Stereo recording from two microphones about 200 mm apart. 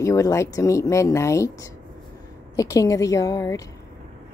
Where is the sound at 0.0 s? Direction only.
15° left (ahead or behind).